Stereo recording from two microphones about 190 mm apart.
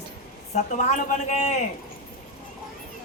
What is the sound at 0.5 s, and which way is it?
A woman's voice, 40° left (ahead or behind).